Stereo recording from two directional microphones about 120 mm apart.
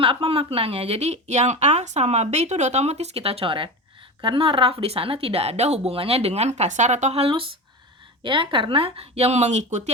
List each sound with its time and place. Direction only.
0.0 s speech: 50° right (ahead or behind); by 7.2 s 75° right (ahead or behind)
7.2 s speech: 50° right (ahead or behind); by 9.9 s 75° right (ahead or behind)